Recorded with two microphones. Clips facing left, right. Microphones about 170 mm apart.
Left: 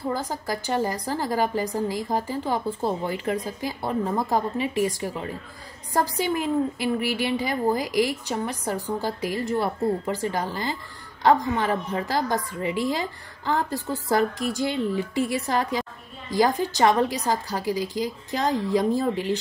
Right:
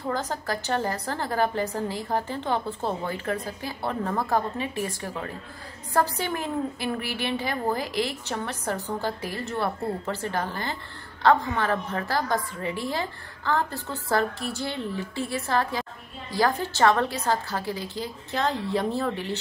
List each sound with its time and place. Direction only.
0.1 s a woman's voice: 10° left (ahead or behind)